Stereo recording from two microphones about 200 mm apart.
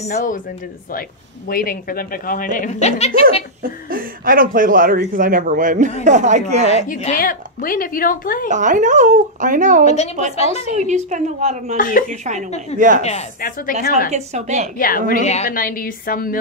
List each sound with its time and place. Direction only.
0.0 s speech: 40° left (ahead or behind)
1.5 s a woman's voice: 45° left (ahead or behind)
3.9 s speech: 45° right (ahead or behind)
6.7 s a woman's voice: 35° left (ahead or behind)
8.5 s speech: 40° right (ahead or behind)
9.8 s speech: 35° left (ahead or behind)
10.8 s speech: 35° right (ahead or behind)
11.7 s speech: 40° left (ahead or behind)
12.1 s speech: 35° right (ahead or behind)
12.4 s speech: 35° left (ahead or behind)
12.7 s speech: 40° right (ahead or behind)
13.4 s a woman's voice: 50° left (ahead or behind)
14.1 s speech: 35° right (ahead or behind)
14.8 s a woman's voice: 45° left (ahead or behind)